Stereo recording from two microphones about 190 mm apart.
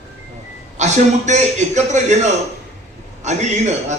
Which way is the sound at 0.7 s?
35° right (ahead or behind).